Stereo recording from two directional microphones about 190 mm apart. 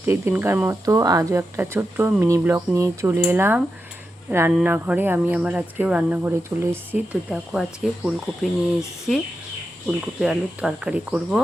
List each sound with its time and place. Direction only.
0.0 s speech: 10° right (ahead or behind)